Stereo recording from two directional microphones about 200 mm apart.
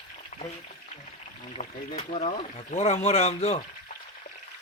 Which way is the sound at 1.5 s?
35° left (ahead or behind).